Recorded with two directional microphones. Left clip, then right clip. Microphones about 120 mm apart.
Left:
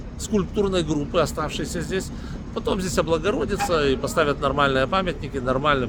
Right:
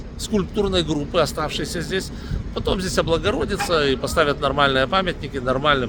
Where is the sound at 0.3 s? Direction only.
10° right (ahead or behind).